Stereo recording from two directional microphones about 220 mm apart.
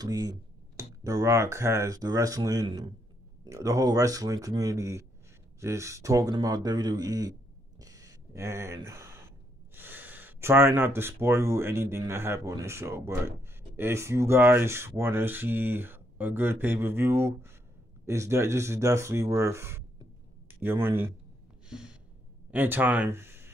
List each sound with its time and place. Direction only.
0.0 s speech: 20° right (ahead or behind)
7.8 s a sound: 15° right (ahead or behind)
9.8 s speech: 10° right (ahead or behind)
21.6 s gasp: 5° right (ahead or behind)
22.5 s speech: 10° right (ahead or behind)